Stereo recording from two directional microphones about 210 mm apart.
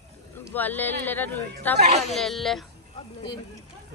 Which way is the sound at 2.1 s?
Centre (ahead or behind).